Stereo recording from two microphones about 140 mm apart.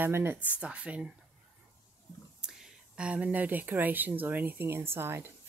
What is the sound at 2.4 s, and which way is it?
Speech, 5° right (ahead or behind).